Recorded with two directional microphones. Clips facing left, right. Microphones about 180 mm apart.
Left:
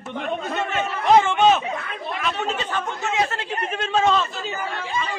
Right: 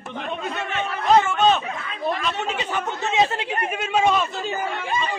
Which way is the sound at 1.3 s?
10° left (ahead or behind).